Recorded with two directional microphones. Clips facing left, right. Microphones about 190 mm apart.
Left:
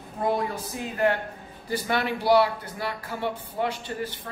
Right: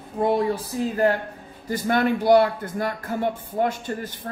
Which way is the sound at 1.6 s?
50° right (ahead or behind).